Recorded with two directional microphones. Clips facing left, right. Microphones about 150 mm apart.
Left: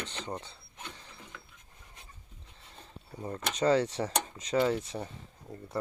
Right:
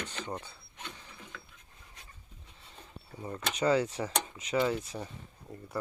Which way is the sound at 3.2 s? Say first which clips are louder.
Left 1 dB; 25° left (ahead or behind).